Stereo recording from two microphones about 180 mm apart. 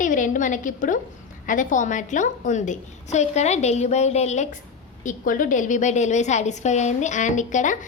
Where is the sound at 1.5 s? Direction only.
45° left (ahead or behind).